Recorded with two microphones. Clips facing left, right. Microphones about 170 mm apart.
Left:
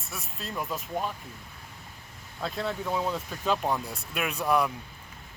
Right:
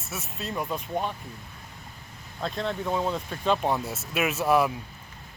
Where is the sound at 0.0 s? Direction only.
Centre (ahead or behind).